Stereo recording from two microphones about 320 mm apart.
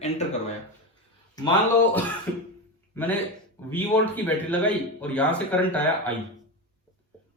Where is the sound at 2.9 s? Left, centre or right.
Centre.